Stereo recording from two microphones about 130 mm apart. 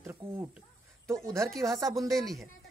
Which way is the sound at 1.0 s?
25° right (ahead or behind).